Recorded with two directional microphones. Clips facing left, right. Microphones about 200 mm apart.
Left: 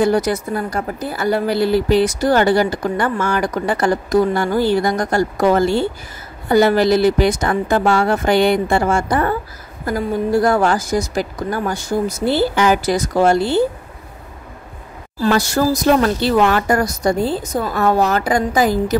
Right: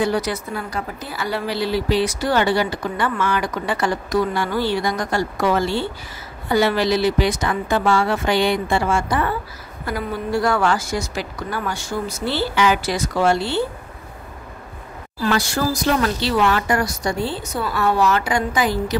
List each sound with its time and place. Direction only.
0.0 s a woman's voice: 45° left (ahead or behind)
15.1 s a woman's voice: 40° left (ahead or behind)